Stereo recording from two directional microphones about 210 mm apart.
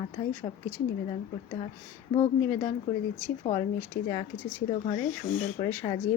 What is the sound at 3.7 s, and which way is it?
Speech, 15° left (ahead or behind).